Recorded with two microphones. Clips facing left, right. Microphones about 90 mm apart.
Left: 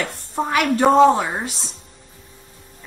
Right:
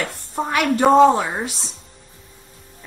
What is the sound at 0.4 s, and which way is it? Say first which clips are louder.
A woman's voice: even; centre (ahead or behind).